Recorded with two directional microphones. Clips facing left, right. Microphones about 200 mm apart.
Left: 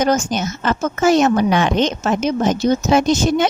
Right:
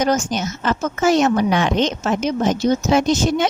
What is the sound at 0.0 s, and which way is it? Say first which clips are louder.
A woman's voice: left 2 dB; 50° left (ahead or behind).